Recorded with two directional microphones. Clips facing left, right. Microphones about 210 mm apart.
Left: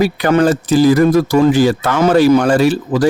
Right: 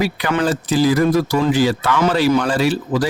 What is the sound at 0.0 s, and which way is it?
Speech, 45° left (ahead or behind).